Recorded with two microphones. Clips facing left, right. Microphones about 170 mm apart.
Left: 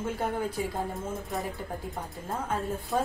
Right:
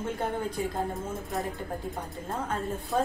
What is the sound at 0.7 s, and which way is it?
Speech, centre (ahead or behind).